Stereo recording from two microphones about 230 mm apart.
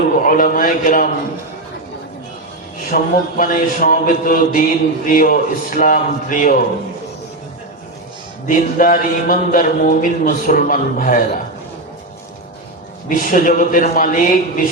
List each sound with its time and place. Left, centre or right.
0.2 s mantra: left
2.9 s mantra: left
8.4 s mantra: left
13.1 s mantra: left